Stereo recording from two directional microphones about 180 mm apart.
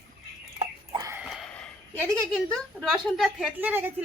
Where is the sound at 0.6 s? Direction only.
20° right (ahead or behind).